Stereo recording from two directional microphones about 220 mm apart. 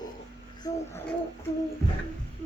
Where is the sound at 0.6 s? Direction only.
15° left (ahead or behind).